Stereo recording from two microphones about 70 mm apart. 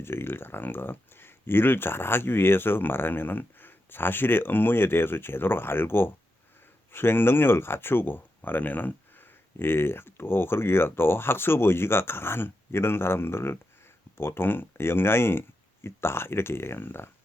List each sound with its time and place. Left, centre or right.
0.0 s speech: left